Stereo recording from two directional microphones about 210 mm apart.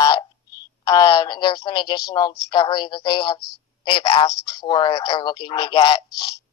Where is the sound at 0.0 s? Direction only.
15° left (ahead or behind).